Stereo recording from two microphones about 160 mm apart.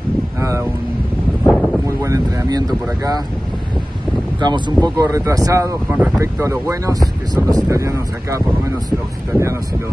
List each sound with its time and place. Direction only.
0.4 s vehicle: 20° right (ahead or behind)
1.4 s a sound: centre (ahead or behind)
1.9 s speech: 20° right (ahead or behind)
4.4 s speech: 25° right (ahead or behind)